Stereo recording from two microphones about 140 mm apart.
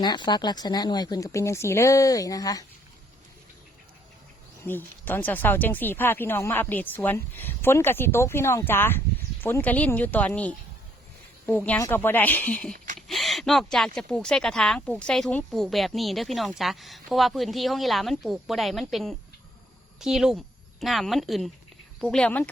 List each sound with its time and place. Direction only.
0.0 s speech: 30° left (ahead or behind)
4.6 s speech: 15° left (ahead or behind)
12.7 s a sound: 70° right (ahead or behind)
13.0 s speech: centre (ahead or behind)